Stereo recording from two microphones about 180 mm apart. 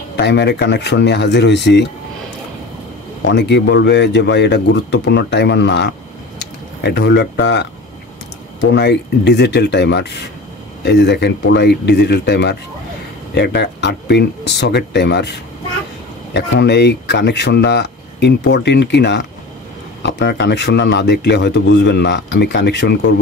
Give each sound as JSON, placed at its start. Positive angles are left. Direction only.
{"t": 0.1, "sound": "speech", "side_deg": 70}
{"t": 3.3, "sound": "speech", "side_deg": 75}
{"t": 16.3, "sound": "speech", "side_deg": 70}